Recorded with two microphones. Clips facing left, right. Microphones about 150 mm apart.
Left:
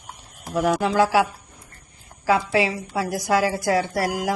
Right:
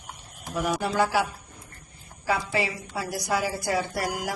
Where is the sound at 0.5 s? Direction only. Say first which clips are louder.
Left 6 dB; 90° left.